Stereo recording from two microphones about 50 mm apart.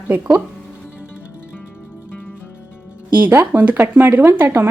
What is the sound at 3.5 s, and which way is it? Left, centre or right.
Speech, right.